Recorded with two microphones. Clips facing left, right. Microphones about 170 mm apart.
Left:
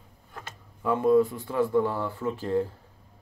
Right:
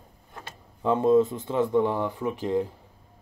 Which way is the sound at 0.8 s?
20° right (ahead or behind).